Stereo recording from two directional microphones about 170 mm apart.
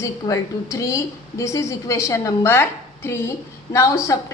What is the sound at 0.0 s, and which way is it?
A woman's voice, 20° left (ahead or behind).